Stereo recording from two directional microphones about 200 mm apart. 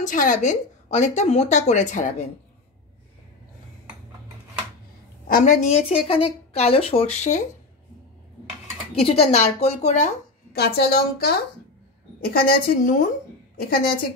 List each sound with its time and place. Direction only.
0.0 s a woman's voice: 40° left (ahead or behind)
5.3 s a woman's voice: 40° left (ahead or behind)
9.0 s a woman's voice: 30° left (ahead or behind)
10.5 s a woman's voice: 55° left (ahead or behind)